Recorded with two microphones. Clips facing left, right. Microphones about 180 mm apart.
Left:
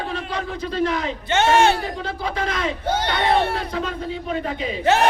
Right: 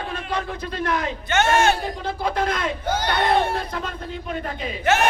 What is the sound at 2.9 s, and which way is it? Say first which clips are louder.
Speech: left 1 dB; 30° left (ahead or behind).